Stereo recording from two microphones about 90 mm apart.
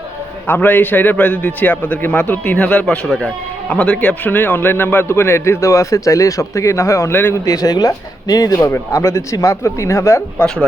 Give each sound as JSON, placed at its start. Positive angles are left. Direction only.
{"t": 0.4, "sound": "a man's voice", "side_deg": 20}
{"t": 7.5, "sound": "speech", "side_deg": 40}